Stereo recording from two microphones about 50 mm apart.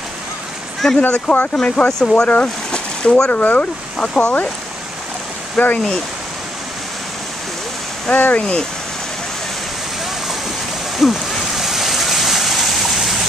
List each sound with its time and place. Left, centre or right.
0.8 s speech: centre
1.3 s speech: left
1.6 s speech: centre
3.3 s speech: left
5.6 s speech: left
8.1 s speech: left
8.4 s speech: centre
11.0 s waves: centre